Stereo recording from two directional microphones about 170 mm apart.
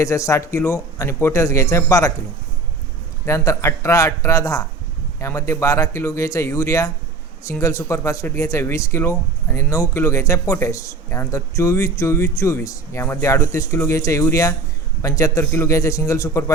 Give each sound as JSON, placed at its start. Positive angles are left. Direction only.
{"t": 0.0, "sound": "speech", "side_deg": 20}
{"t": 3.2, "sound": "a man's voice", "side_deg": 15}